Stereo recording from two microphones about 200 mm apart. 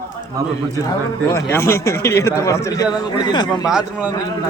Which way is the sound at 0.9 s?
15° left (ahead or behind).